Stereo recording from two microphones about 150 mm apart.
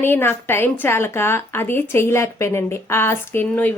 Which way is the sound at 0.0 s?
15° left (ahead or behind).